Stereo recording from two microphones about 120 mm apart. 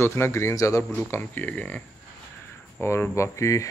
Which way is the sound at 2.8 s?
20° left (ahead or behind).